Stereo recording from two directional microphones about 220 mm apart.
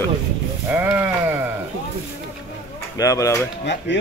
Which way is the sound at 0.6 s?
10° right (ahead or behind).